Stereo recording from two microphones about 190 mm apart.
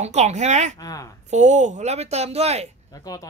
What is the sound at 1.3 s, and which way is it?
Speech, 40° right (ahead or behind).